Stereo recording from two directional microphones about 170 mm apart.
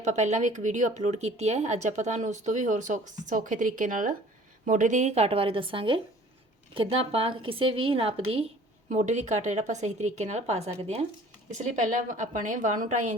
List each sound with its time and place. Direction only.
0.0 s a woman's voice: 45° right (ahead or behind)